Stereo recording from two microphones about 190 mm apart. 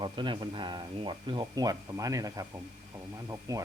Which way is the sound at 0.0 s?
25° right (ahead or behind).